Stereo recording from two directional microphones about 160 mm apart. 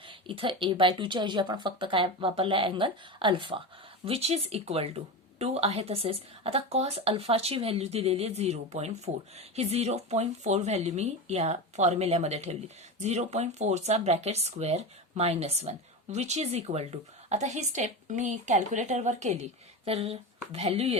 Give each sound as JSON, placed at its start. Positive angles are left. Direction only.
{"t": 0.1, "sound": "a woman's voice", "side_deg": -35}